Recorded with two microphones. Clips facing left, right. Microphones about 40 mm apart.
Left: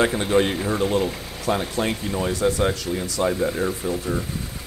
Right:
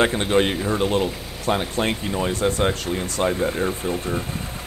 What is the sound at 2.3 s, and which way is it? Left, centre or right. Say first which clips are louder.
Speech: left 3 dB; right.